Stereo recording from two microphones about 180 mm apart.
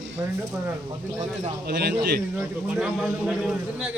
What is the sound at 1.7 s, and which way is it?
Speech, 65° right (ahead or behind).